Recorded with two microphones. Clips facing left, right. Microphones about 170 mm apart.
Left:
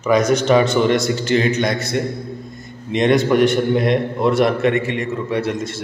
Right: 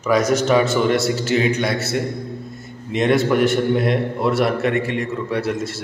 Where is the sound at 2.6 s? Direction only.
5° right (ahead or behind).